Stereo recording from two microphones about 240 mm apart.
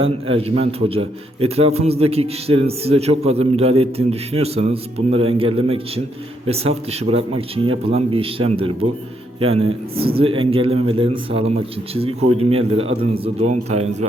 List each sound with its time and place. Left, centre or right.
0.0 s a man's voice: right